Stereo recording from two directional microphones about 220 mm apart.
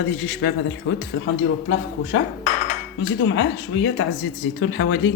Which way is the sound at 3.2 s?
60° left (ahead or behind).